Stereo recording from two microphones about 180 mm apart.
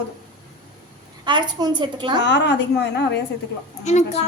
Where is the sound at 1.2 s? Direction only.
25° right (ahead or behind).